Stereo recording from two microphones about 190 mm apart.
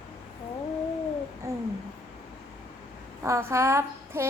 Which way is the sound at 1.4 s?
15° right (ahead or behind).